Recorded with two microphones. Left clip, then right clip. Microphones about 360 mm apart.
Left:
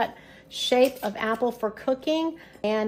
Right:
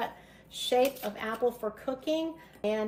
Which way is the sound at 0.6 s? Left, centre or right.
Left.